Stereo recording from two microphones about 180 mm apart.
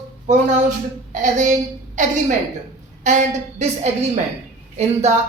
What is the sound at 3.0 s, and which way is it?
Speech, 40° right (ahead or behind).